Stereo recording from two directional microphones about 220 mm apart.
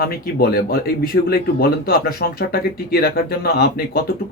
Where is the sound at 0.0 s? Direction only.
45° left (ahead or behind).